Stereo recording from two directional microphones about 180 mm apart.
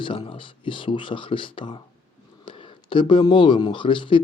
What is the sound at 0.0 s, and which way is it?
Speech, 30° left (ahead or behind).